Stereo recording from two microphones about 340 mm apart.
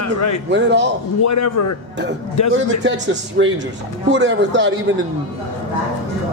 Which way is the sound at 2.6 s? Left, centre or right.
Right.